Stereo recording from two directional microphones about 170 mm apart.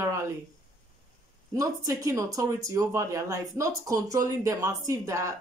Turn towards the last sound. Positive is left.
turn(degrees=-20)  # may be behind; listen again after turning